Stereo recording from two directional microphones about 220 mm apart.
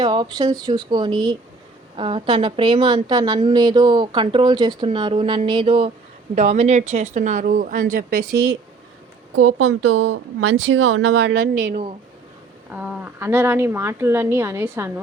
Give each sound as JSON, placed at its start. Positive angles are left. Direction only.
{"t": 0.0, "sound": "a woman's voice", "side_deg": -20}
{"t": 9.3, "sound": "speech", "side_deg": -75}
{"t": 11.6, "sound": "speech", "side_deg": -35}
{"t": 12.7, "sound": "a woman's voice", "side_deg": -5}